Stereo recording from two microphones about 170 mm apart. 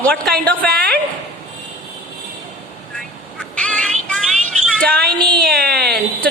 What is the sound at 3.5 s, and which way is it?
Music, 5° left (ahead or behind).